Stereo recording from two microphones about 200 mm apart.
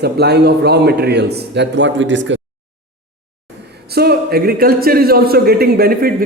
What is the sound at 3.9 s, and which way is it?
Speech, 50° right (ahead or behind).